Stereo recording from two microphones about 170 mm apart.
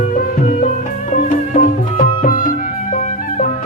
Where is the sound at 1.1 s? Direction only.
50° left (ahead or behind).